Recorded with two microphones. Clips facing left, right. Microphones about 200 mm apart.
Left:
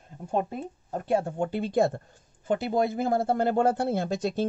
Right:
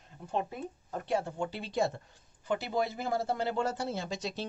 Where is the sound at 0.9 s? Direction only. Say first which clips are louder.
Left 6 dB; 50° left (ahead or behind).